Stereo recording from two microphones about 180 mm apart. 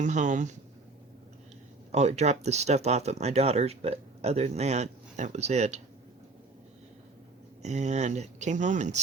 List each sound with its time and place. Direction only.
0.0 s speech: 40° right (ahead or behind)
1.9 s speech: 40° right (ahead or behind)
7.6 s speech: 40° right (ahead or behind)